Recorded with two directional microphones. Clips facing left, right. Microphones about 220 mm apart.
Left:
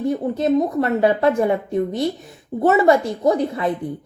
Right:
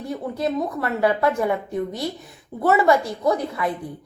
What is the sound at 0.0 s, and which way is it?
A woman's voice, 20° left (ahead or behind).